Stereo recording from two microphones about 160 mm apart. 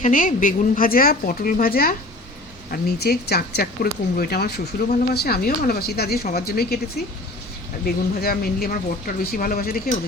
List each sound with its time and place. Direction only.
0.0 s speech: 55° left (ahead or behind)
3.0 s speech: 80° left